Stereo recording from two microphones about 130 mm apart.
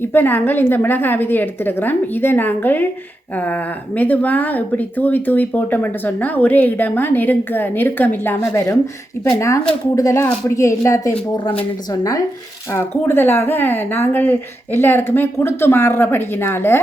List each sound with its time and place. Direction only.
0.0 s speech: 15° left (ahead or behind)
9.9 s a woman's voice: 25° left (ahead or behind)
12.7 s speech: 15° left (ahead or behind)